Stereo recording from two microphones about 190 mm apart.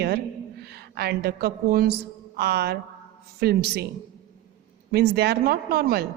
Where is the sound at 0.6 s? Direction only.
55° right (ahead or behind).